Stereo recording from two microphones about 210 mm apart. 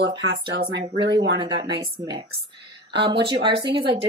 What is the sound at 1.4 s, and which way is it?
A woman's voice, 20° right (ahead or behind).